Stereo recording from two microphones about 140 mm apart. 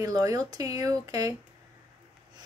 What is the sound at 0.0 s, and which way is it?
Speech, 25° right (ahead or behind).